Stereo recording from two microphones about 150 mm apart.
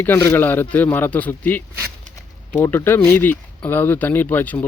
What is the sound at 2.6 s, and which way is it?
Speech, 15° left (ahead or behind).